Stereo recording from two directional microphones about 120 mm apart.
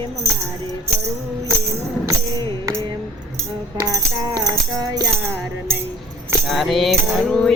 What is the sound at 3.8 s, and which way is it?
Music, 30° right (ahead or behind).